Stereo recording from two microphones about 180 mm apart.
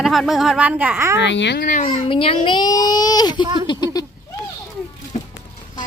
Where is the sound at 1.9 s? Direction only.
30° left (ahead or behind).